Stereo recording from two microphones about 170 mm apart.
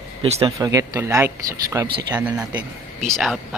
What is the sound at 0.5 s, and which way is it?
Speech, 20° right (ahead or behind).